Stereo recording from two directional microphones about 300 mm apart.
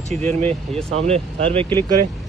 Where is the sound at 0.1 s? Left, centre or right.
Centre.